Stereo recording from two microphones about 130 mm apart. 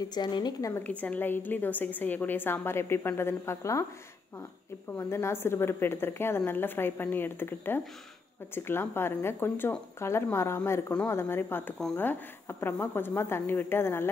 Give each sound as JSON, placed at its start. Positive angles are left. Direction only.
{"t": 0.1, "sound": "a woman's voice", "side_deg": 35}
{"t": 0.8, "sound": "a woman's voice", "side_deg": 10}
{"t": 4.9, "sound": "a woman's voice", "side_deg": 20}